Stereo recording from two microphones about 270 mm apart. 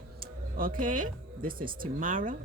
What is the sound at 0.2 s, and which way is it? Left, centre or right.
A woman's voice, right.